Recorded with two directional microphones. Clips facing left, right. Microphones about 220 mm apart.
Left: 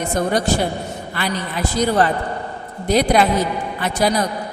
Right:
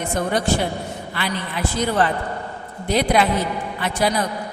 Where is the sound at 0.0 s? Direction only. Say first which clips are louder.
Left 3 dB; 40° left (ahead or behind).